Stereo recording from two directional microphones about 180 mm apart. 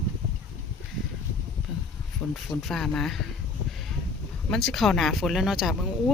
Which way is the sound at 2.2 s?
5° left (ahead or behind).